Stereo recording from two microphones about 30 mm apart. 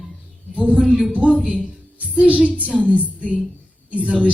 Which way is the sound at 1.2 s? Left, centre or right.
Right.